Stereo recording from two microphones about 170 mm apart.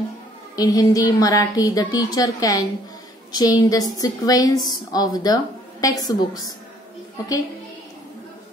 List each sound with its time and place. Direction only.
0.6 s a woman's voice: 20° left (ahead or behind)